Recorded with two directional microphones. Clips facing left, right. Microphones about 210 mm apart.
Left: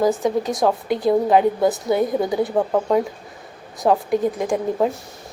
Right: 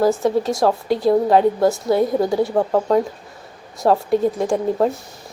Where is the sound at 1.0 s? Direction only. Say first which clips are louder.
Right 1 dB; 15° left (ahead or behind).